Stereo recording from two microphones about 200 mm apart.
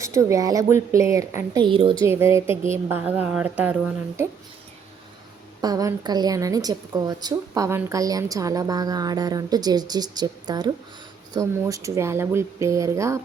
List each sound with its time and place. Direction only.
0.0 s speech: 15° right (ahead or behind)
2.0 s speech: 15° right (ahead or behind)
5.6 s speech: 20° right (ahead or behind)